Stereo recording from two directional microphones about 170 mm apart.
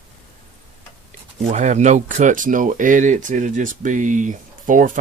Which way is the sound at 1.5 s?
45° right (ahead or behind).